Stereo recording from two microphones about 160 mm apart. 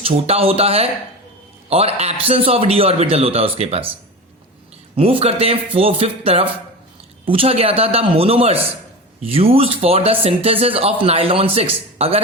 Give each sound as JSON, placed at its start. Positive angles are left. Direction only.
{"t": 0.0, "sound": "speech", "side_deg": -40}
{"t": 4.9, "sound": "speech", "side_deg": -35}